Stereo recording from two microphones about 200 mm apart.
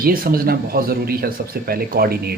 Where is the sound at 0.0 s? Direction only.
45° right (ahead or behind).